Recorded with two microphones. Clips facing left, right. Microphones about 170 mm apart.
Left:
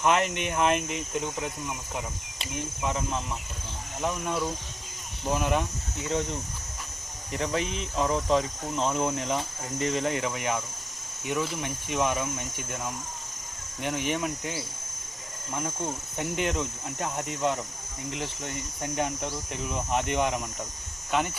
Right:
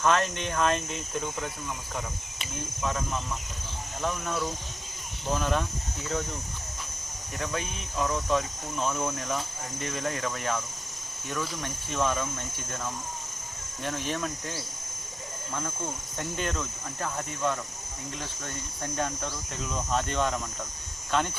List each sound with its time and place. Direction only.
0.0 s speech: 15° left (ahead or behind)
7.3 s speech: 30° left (ahead or behind)
7.6 s speech: 90° left
7.9 s speech: 25° left (ahead or behind); by 21.3 s 10° left (ahead or behind)